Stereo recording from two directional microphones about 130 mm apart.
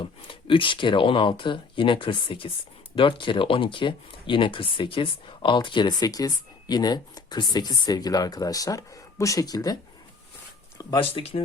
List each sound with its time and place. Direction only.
0.0 s speech: 40° left (ahead or behind)
11.1 s speech: 50° left (ahead or behind)